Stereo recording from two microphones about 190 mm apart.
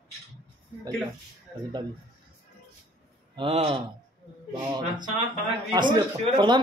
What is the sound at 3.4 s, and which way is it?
Speech, 30° right (ahead or behind).